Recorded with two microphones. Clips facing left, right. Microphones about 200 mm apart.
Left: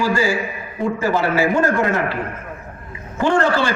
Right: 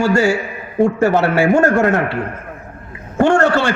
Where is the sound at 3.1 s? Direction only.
70° right (ahead or behind).